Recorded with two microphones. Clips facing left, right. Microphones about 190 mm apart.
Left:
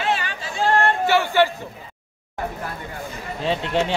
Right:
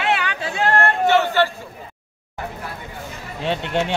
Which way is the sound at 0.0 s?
70° right (ahead or behind).